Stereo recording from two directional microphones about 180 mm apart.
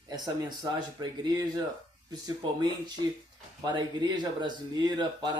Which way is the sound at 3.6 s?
25° right (ahead or behind).